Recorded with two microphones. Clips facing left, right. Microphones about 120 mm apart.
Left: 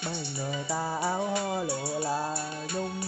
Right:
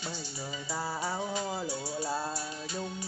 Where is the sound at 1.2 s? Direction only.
65° left (ahead or behind).